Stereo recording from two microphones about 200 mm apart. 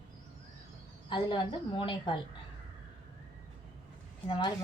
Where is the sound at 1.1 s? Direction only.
25° left (ahead or behind).